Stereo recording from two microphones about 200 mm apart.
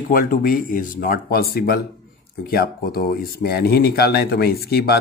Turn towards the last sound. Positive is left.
turn(degrees=50)  # may be behind; listen again after turning